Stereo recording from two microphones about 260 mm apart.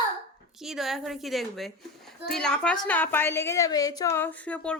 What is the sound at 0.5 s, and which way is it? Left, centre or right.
A woman's voice, centre.